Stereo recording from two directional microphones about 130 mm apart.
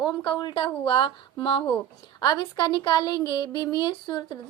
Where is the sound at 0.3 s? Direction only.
35° left (ahead or behind).